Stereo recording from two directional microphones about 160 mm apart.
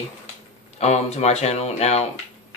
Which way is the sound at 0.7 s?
45° left (ahead or behind).